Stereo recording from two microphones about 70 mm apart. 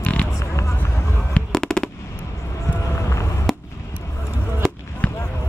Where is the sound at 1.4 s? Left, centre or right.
Centre.